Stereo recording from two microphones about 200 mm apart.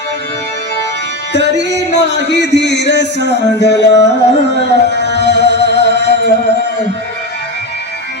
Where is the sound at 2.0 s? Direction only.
60° left (ahead or behind).